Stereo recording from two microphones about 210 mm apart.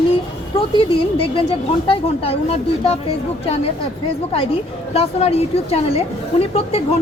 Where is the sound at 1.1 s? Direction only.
25° left (ahead or behind).